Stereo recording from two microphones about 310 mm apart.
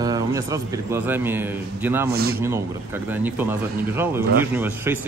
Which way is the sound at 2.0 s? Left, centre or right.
Right.